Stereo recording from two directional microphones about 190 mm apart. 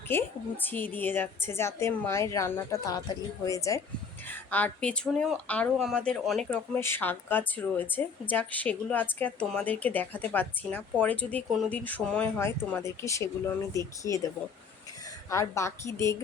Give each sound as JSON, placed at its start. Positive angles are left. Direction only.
{"t": 0.1, "sound": "speech", "side_deg": 10}
{"t": 15.3, "sound": "speech", "side_deg": 15}